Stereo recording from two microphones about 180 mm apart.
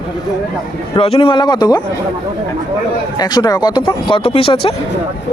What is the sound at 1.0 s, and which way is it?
Speech, 30° left (ahead or behind).